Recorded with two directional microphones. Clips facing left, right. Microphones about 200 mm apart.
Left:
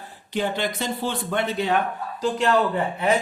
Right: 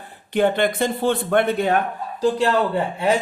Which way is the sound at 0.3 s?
55° right (ahead or behind).